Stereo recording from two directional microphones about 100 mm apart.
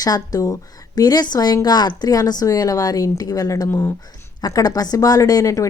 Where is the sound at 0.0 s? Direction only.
40° left (ahead or behind).